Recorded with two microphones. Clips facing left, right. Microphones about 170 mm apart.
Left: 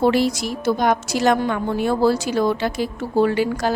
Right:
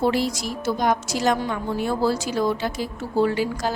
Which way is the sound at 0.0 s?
70° left (ahead or behind).